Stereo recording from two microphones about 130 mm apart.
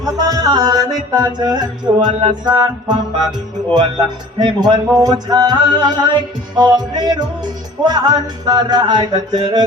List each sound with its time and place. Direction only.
0.2 s music: 30° right (ahead or behind)